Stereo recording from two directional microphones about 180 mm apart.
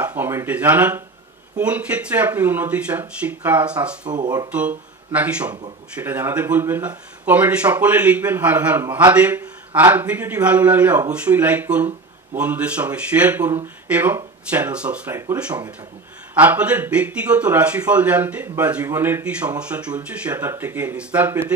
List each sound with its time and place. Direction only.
0.0 s speech: 10° right (ahead or behind)
4.1 s speech: 25° right (ahead or behind)
4.5 s speech: 10° right (ahead or behind)